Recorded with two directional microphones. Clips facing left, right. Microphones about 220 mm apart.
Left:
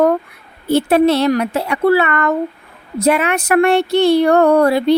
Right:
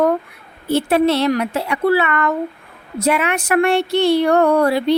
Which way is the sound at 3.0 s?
40° left (ahead or behind).